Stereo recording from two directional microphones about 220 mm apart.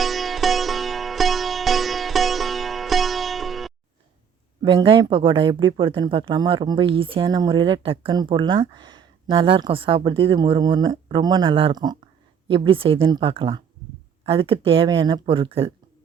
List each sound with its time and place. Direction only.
0.0 s sitar: centre (ahead or behind)
4.6 s speech: 25° right (ahead or behind)